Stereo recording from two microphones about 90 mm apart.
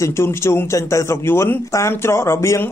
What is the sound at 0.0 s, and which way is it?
A man's voice, 30° left (ahead or behind).